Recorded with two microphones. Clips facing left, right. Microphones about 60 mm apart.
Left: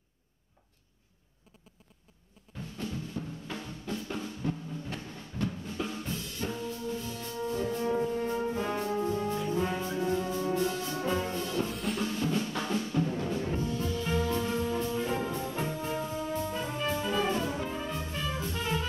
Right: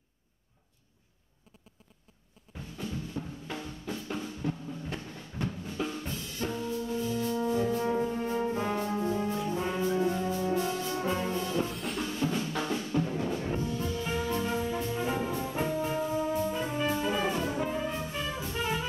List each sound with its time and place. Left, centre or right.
2.5 s drum: centre
5.8 s drum: centre
6.6 s brass instrument: centre
12.2 s music: centre
15.1 s brass instrument: centre
15.4 s brass instrument: centre